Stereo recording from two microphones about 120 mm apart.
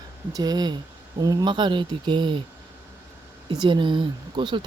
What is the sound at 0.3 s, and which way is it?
Speech, 35° right (ahead or behind).